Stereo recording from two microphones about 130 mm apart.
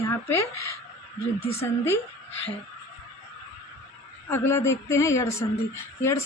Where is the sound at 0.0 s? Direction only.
20° left (ahead or behind).